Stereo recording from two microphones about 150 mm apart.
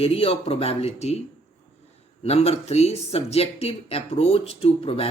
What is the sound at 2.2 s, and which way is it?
Speech, 45° left (ahead or behind).